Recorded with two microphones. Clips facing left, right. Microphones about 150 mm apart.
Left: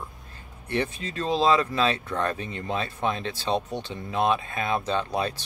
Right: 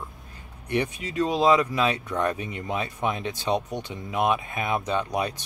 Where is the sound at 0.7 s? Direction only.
15° right (ahead or behind).